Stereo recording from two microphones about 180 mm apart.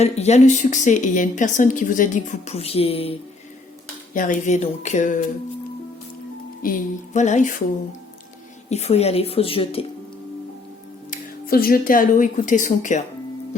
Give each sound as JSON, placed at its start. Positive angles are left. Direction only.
{"t": 0.0, "sound": "a woman's voice", "side_deg": 40}
{"t": 4.1, "sound": "speech", "side_deg": 50}
{"t": 6.6, "sound": "a woman's voice", "side_deg": 50}
{"t": 8.7, "sound": "speech", "side_deg": 35}
{"t": 11.1, "sound": "speech", "side_deg": 55}